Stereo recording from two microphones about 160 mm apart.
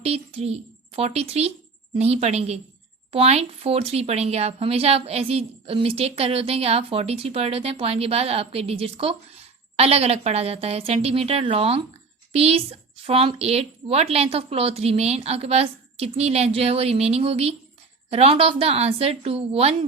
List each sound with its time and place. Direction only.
0.0 s a child's voice: 40° right (ahead or behind)